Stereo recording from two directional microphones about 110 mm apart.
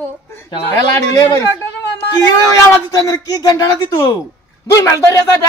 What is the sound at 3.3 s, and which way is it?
Speech, 35° left (ahead or behind).